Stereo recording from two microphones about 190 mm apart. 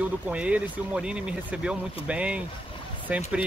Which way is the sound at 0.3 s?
5° right (ahead or behind).